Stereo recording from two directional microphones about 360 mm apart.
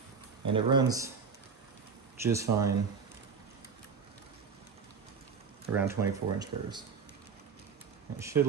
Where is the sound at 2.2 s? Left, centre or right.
Centre.